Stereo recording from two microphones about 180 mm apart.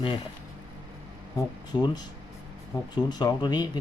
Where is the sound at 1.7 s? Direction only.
25° left (ahead or behind).